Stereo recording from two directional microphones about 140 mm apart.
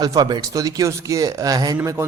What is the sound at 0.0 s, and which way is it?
Speech, 30° right (ahead or behind).